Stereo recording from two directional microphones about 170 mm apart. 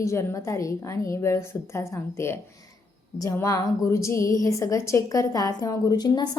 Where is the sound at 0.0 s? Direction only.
15° left (ahead or behind).